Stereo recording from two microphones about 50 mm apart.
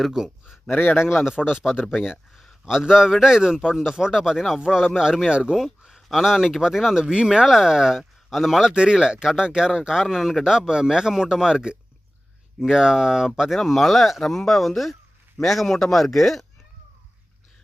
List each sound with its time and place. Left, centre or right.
0.1 s a man's voice: centre
0.7 s speech: left
1.9 s a man's voice: centre
5.5 s a man's voice: centre
8.7 s a man's voice: centre
13.6 s speech: centre